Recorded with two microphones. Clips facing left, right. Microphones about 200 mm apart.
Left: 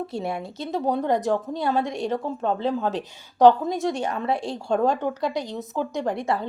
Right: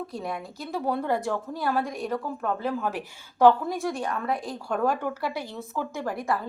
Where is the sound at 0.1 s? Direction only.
25° left (ahead or behind).